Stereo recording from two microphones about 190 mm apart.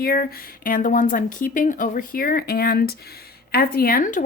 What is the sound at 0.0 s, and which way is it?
Speech, 50° left (ahead or behind).